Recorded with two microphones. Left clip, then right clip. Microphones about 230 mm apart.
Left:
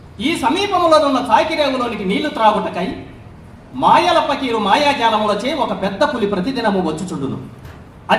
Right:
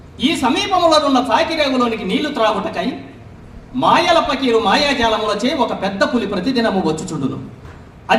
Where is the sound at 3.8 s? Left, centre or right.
Right.